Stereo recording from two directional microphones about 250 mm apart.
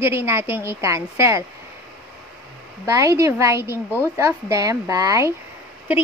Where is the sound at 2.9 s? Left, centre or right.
Centre.